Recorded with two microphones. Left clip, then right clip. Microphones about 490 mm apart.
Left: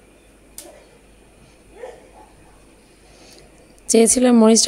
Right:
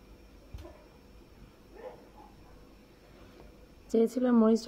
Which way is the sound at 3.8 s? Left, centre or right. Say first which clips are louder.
Left 13 dB; right.